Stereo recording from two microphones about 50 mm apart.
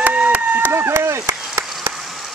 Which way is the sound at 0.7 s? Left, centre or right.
Right.